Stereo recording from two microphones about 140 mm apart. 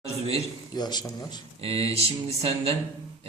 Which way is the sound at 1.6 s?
40° right (ahead or behind).